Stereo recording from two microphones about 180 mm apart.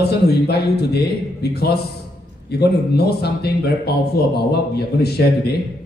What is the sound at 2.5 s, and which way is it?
Speech, 60° left (ahead or behind).